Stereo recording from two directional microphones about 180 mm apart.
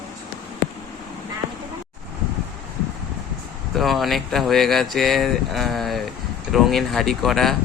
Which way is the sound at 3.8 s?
Centre (ahead or behind).